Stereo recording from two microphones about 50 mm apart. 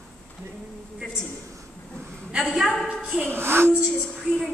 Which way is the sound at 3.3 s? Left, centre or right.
Right.